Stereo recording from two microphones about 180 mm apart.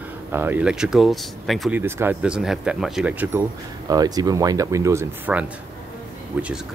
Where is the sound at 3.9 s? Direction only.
20° right (ahead or behind).